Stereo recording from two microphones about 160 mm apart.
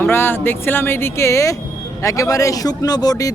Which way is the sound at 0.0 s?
15° left (ahead or behind).